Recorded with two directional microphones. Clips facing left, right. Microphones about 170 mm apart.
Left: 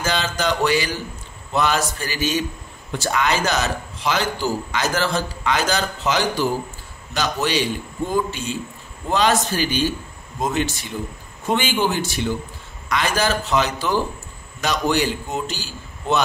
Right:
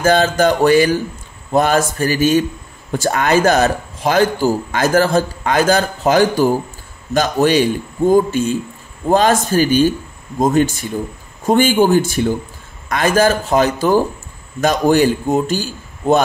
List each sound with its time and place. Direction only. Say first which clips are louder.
0.0 s speech: right 10 dB; 50° right (ahead or behind)